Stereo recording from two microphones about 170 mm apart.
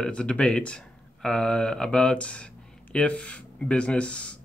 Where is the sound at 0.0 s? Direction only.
5° left (ahead or behind).